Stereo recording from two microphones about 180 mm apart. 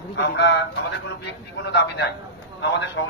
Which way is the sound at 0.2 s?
70° left (ahead or behind).